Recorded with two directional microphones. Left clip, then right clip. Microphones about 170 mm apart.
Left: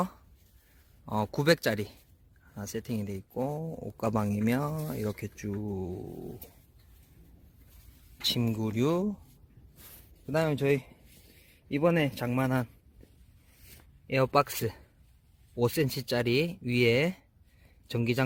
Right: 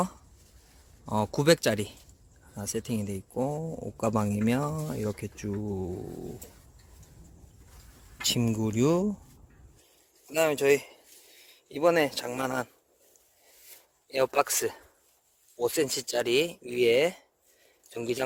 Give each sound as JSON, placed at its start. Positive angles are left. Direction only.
{"t": 1.0, "sound": "speech", "side_deg": 0}
{"t": 8.2, "sound": "speech", "side_deg": -5}
{"t": 10.3, "sound": "speech", "side_deg": -15}
{"t": 14.1, "sound": "speech", "side_deg": -10}